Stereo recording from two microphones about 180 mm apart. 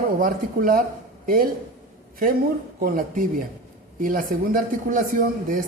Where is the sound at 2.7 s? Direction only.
50° right (ahead or behind).